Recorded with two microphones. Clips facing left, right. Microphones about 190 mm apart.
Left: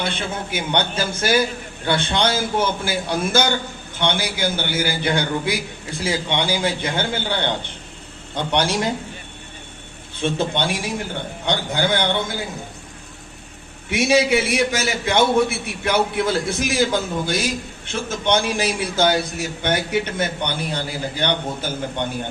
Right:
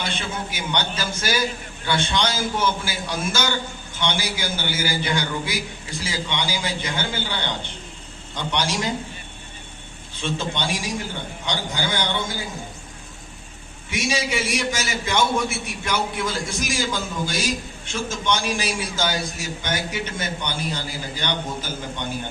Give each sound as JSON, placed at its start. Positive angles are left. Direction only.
{"t": 0.0, "sound": "a man's voice", "side_deg": 55}
{"t": 10.2, "sound": "a man's voice", "side_deg": 55}
{"t": 13.9, "sound": "a man's voice", "side_deg": 60}